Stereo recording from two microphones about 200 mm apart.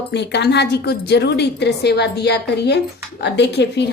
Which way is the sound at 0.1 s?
60° left (ahead or behind).